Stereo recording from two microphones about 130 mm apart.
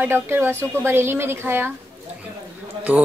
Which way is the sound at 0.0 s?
15° right (ahead or behind).